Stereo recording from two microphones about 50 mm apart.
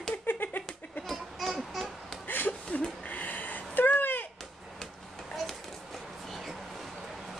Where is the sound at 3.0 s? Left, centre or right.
Left.